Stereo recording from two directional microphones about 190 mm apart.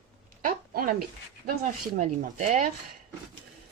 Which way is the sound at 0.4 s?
50° right (ahead or behind).